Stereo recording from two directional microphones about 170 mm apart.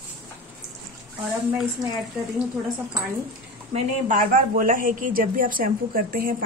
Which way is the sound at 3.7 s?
50° right (ahead or behind).